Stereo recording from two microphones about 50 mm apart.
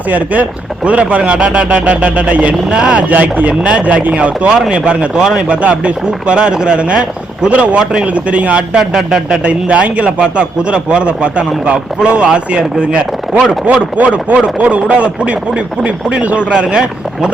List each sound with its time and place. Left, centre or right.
0.9 s speech: right
3.1 s speech: right; by 5.4 s centre
5.4 s speech: right
8.7 s a man's voice: centre
9.4 s speech: right